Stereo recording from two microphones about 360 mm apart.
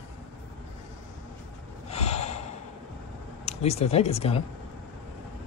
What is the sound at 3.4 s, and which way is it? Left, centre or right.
Speech, centre.